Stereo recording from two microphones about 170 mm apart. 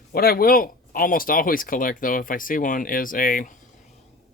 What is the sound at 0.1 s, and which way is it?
Speech, 60° left (ahead or behind).